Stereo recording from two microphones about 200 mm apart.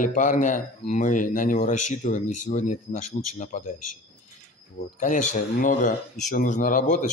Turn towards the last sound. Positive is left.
turn(degrees=40)  # may be behind; listen again after turning